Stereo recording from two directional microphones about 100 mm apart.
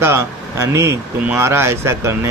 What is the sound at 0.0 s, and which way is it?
Speech, 30° right (ahead or behind).